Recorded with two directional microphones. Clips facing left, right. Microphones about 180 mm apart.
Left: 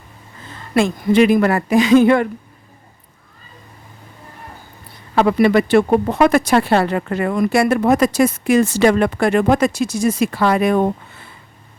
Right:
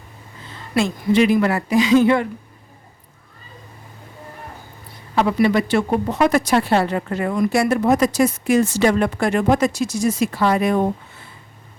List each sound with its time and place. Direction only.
0.7 s speech: 55° left (ahead or behind)
5.1 s speech: 60° left (ahead or behind)